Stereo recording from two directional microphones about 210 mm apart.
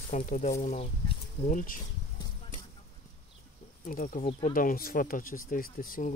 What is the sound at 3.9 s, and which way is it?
Speech, 40° left (ahead or behind).